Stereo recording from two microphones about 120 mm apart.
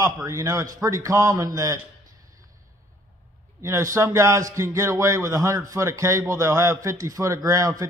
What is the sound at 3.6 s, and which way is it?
A man's voice, 25° right (ahead or behind).